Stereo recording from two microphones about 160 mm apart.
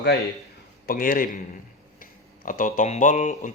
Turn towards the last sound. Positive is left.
turn(degrees=50)  # may be behind; listen again after turning